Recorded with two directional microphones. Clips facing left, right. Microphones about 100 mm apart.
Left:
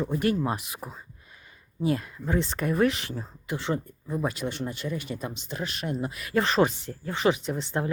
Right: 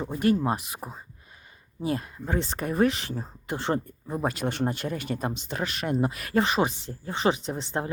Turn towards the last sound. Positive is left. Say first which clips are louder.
# left 1 dB
turn(degrees=-30)  # may be behind; listen again after turning